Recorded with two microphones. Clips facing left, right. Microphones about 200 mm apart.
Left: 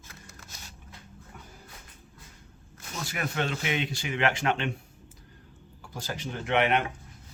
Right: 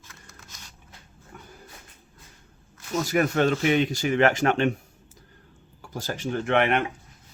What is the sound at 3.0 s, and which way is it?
Speech, 45° right (ahead or behind).